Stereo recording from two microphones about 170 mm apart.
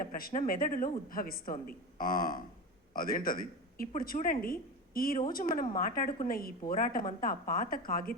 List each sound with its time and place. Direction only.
0.0 s a woman's voice: 55° left (ahead or behind)